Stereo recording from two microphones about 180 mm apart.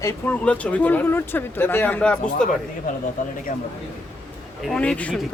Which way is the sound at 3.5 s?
45° left (ahead or behind).